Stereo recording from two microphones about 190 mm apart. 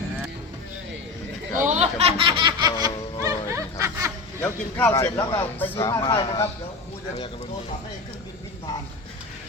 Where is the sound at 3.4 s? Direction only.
15° right (ahead or behind).